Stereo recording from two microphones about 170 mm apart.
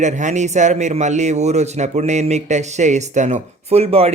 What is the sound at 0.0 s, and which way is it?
A man's voice, 45° right (ahead or behind).